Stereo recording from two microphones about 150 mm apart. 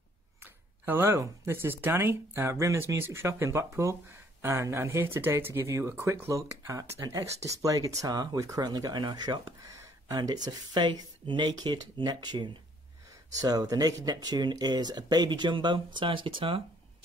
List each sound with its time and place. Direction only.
0.8 s speech: 15° right (ahead or behind); by 16.6 s 35° right (ahead or behind)